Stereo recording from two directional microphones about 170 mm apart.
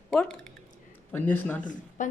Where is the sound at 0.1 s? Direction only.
5° left (ahead or behind).